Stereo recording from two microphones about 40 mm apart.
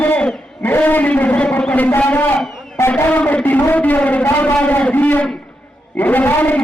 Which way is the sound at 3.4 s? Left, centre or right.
Left.